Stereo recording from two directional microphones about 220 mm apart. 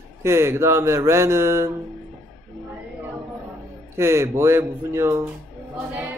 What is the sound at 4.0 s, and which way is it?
Speech, 10° right (ahead or behind).